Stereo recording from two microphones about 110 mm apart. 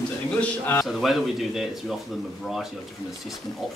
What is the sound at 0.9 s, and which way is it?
Speech, centre (ahead or behind).